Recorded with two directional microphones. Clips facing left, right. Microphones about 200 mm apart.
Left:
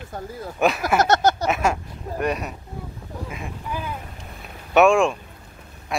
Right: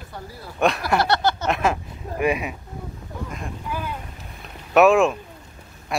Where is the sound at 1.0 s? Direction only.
45° left (ahead or behind).